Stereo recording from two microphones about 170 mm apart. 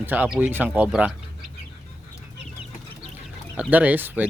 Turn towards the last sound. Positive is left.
turn(degrees=-10)  # may be behind; listen again after turning